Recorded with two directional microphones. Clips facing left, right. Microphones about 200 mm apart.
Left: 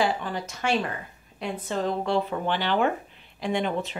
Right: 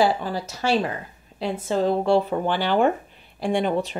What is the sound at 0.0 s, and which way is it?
Speech, 35° right (ahead or behind).